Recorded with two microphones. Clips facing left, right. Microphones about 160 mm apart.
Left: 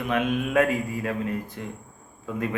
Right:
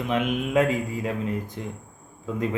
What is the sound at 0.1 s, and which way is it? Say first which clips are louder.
Speech: even; 20° right (ahead or behind).